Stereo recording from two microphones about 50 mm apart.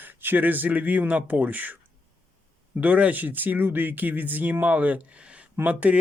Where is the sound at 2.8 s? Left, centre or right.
Right.